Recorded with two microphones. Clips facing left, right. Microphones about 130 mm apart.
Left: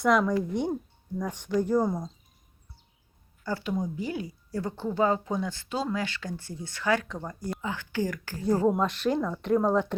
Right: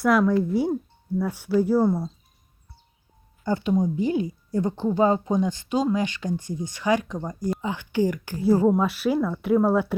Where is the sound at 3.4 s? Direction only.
20° right (ahead or behind).